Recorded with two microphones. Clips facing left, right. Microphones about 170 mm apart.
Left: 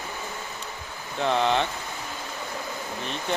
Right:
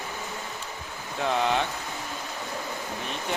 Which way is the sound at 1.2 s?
5° right (ahead or behind).